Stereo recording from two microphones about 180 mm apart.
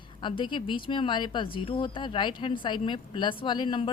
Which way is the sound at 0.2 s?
25° left (ahead or behind).